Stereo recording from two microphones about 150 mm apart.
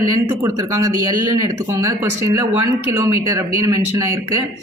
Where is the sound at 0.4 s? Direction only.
20° right (ahead or behind).